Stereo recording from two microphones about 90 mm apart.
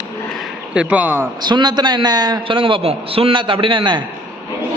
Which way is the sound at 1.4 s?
55° right (ahead or behind).